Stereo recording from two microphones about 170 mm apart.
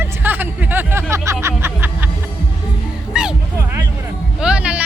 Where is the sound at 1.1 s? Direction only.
15° right (ahead or behind).